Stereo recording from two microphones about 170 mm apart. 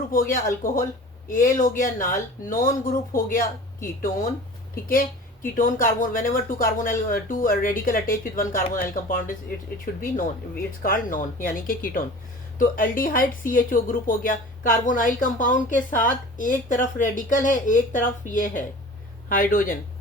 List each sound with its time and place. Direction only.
0.1 s speech: 55° left (ahead or behind)
4.7 s speech: 55° left (ahead or behind)